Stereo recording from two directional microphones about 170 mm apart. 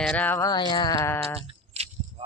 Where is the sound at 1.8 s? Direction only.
40° right (ahead or behind).